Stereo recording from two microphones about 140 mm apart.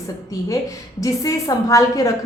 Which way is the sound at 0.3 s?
25° left (ahead or behind).